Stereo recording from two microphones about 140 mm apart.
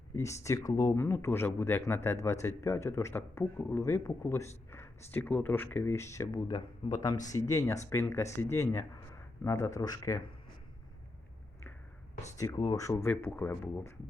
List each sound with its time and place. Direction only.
0.2 s speech: 20° left (ahead or behind)
12.4 s speech: 25° left (ahead or behind)